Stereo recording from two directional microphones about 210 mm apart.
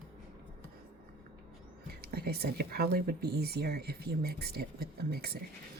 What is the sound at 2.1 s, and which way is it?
Speech, 50° right (ahead or behind).